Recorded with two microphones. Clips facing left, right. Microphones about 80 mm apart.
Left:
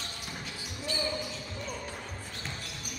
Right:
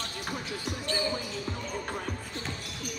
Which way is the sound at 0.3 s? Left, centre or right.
Right.